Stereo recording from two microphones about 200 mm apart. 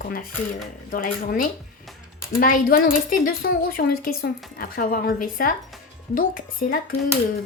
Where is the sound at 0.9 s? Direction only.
45° left (ahead or behind).